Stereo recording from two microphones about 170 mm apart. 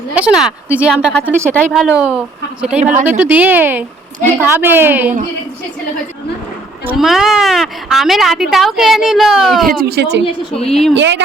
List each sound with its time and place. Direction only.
0.2 s speech: 5° right (ahead or behind)
6.9 s speech: centre (ahead or behind)
9.6 s speech: 70° right (ahead or behind)
10.7 s speech: centre (ahead or behind)
10.9 s speech: 90° right